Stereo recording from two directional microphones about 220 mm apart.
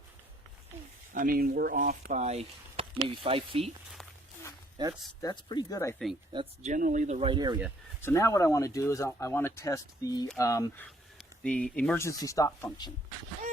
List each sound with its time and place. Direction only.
1.1 s speech: 40° right (ahead or behind); by 3.7 s 25° right (ahead or behind)
4.8 s speech: 20° right (ahead or behind)
5.2 s speech: 20° left (ahead or behind)
6.3 s speech: 30° right (ahead or behind)
8.0 s speech: 15° left (ahead or behind)